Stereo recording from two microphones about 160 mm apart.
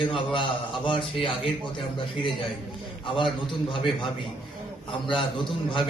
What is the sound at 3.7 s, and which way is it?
Speech, 30° left (ahead or behind).